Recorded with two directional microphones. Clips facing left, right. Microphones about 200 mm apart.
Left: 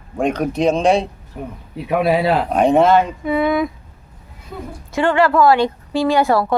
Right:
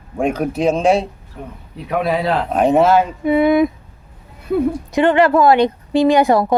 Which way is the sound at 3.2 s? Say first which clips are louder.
Right 4 dB; 20° right (ahead or behind).